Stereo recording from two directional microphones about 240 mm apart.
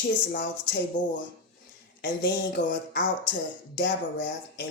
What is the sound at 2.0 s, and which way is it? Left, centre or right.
Speech, left.